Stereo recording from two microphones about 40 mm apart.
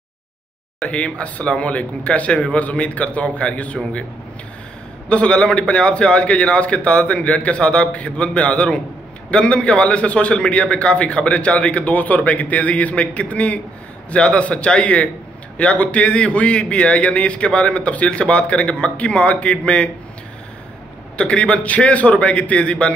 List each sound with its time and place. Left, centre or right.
0.8 s a man's voice: left
5.1 s a man's voice: left
21.2 s a man's voice: left